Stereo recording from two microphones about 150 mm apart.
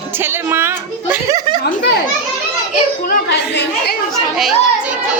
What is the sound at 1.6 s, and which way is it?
Speech, 75° left (ahead or behind).